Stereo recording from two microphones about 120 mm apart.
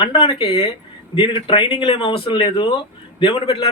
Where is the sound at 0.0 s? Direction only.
40° left (ahead or behind).